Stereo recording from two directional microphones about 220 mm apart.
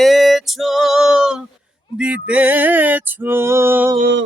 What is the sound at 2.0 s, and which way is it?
Music, 5° right (ahead or behind).